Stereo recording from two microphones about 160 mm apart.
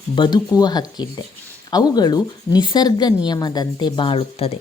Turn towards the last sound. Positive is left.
turn(degrees=35)  # may be behind; listen again after turning